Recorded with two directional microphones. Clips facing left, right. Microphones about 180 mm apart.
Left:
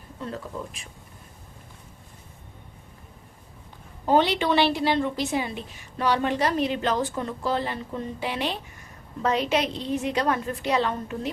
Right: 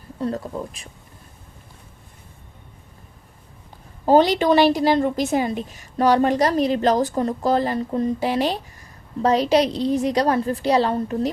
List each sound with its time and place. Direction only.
0.2 s a woman's voice: 35° right (ahead or behind)
4.0 s a woman's voice: 40° right (ahead or behind)